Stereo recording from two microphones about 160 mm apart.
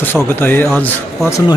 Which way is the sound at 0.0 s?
15° left (ahead or behind).